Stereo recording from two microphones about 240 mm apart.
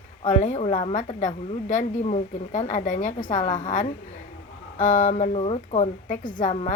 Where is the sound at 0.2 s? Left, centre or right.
Left.